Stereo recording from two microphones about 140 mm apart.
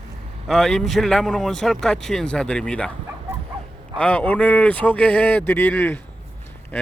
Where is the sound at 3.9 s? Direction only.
10° left (ahead or behind).